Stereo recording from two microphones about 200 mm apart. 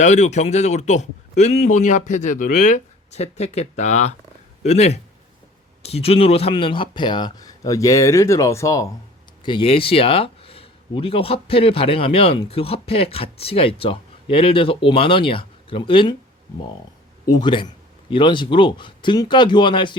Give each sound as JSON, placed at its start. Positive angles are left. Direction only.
{"t": 0.0, "sound": "a man's voice", "side_deg": 35}
{"t": 17.2, "sound": "speech", "side_deg": 20}